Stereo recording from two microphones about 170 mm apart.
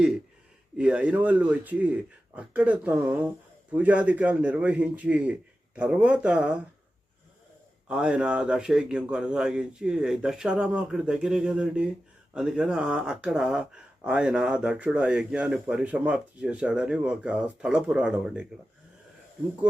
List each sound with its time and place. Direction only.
0.8 s speech: 5° right (ahead or behind)
7.9 s speech: 5° right (ahead or behind)